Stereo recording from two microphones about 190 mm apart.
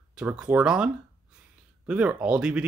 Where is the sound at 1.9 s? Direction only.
5° right (ahead or behind).